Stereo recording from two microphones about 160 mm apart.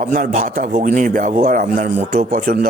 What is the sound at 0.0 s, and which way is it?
Speech, 55° right (ahead or behind).